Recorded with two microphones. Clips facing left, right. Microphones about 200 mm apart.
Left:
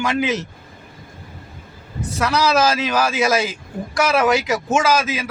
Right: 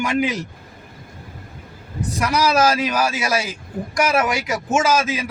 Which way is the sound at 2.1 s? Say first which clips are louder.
Left 1 dB; 10° right (ahead or behind).